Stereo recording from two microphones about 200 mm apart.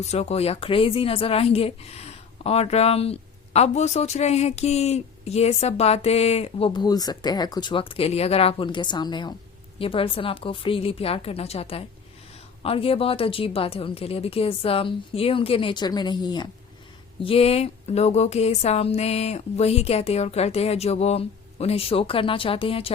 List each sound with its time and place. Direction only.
0.0 s a woman's voice: 30° left (ahead or behind)